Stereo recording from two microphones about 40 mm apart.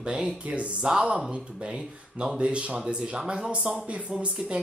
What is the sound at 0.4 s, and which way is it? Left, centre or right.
Speech, right.